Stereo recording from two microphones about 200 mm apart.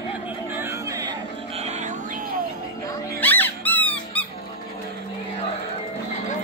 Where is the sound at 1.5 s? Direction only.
35° right (ahead or behind).